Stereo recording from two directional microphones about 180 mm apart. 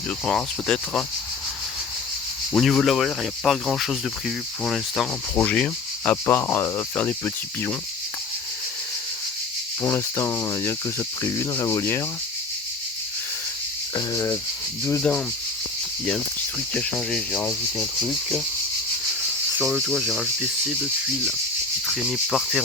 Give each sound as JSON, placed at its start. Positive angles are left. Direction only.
{"t": 0.3, "sound": "speech", "side_deg": 5}
{"t": 2.5, "sound": "speech", "side_deg": 0}
{"t": 5.3, "sound": "sanding", "side_deg": 10}
{"t": 6.2, "sound": "cricket", "side_deg": 15}
{"t": 9.8, "sound": "cricket", "side_deg": 15}
{"t": 13.9, "sound": "rub", "side_deg": 20}
{"t": 14.8, "sound": "cricket", "side_deg": 10}
{"t": 16.7, "sound": "cricket", "side_deg": 5}
{"t": 17.7, "sound": "speech", "side_deg": 0}
{"t": 19.5, "sound": "speech", "side_deg": 0}
{"t": 21.8, "sound": "speech", "side_deg": 0}